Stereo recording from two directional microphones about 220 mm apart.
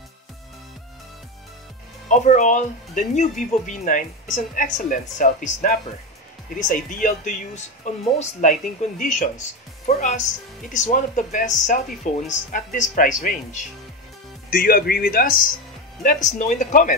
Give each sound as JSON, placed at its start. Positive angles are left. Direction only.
{"t": 2.0, "sound": "speech", "side_deg": 35}